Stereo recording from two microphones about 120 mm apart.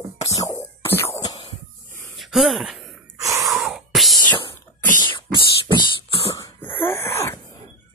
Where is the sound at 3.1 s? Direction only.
25° right (ahead or behind).